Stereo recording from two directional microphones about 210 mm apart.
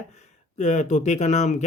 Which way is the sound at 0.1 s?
35° left (ahead or behind).